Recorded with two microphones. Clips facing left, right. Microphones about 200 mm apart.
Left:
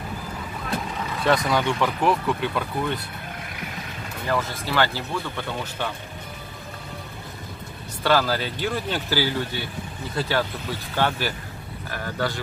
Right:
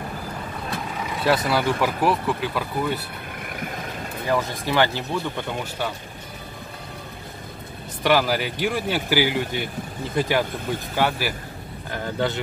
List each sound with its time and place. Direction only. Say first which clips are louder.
1.2 s speech: even; 5° right (ahead or behind)
4.3 s speech: right 2 dB; 15° right (ahead or behind)
8.0 s speech: right 1 dB; 15° right (ahead or behind)
11.9 s speech: right 3 dB; 20° right (ahead or behind)